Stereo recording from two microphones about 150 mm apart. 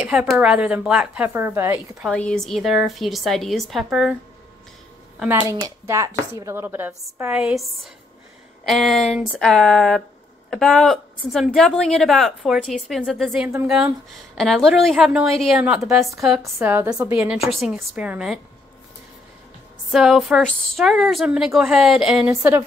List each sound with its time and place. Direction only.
0.0 s speech: 10° right (ahead or behind)
2.0 s a woman's voice: 5° left (ahead or behind)
5.5 s speech: 20° right (ahead or behind)
8.6 s a woman's voice: centre (ahead or behind)
16.5 s speech: 15° right (ahead or behind)
17.2 s a woman's voice: 5° right (ahead or behind)
19.9 s a woman's voice: 5° right (ahead or behind)